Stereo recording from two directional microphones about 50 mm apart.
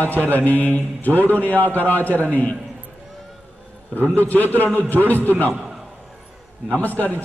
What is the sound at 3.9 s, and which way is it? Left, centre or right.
Speech, left.